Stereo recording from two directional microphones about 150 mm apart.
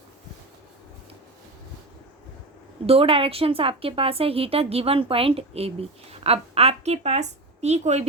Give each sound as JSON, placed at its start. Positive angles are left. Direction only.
{"t": 2.8, "sound": "a woman's voice", "side_deg": -40}